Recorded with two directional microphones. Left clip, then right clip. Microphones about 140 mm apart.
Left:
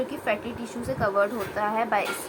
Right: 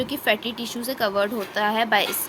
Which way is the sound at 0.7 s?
55° right (ahead or behind).